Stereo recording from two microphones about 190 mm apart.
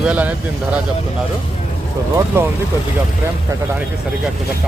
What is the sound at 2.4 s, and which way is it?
Speech, 10° right (ahead or behind).